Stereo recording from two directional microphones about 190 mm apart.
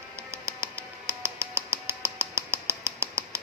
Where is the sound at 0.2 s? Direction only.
15° right (ahead or behind).